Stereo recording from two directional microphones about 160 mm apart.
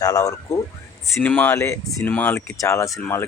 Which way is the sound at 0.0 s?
20° left (ahead or behind).